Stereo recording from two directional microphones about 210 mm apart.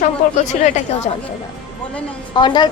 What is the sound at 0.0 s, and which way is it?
A woman's voice, 35° left (ahead or behind).